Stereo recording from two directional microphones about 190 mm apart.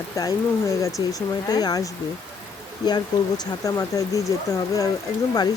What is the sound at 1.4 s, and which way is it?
Speech, 20° left (ahead or behind).